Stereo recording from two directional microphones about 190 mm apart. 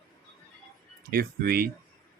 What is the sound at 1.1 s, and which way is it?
Speech, 50° right (ahead or behind).